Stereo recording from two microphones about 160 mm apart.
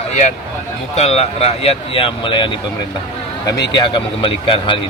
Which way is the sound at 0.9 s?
40° left (ahead or behind).